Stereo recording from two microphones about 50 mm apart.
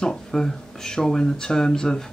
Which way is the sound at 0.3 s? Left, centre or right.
Centre.